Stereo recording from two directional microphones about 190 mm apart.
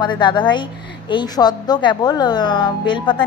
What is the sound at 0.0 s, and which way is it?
A woman's voice, 25° left (ahead or behind).